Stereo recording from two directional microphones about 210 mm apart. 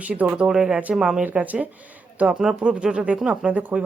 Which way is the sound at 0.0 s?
5° right (ahead or behind).